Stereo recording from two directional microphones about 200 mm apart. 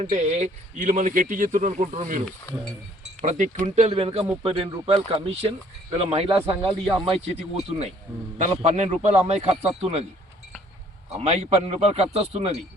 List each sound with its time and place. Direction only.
0.0 s speech: 35° right (ahead or behind)
8.4 s speech: 35° right (ahead or behind)
11.2 s speech: 30° right (ahead or behind)